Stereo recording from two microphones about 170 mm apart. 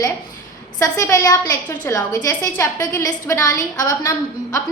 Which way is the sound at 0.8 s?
20° left (ahead or behind).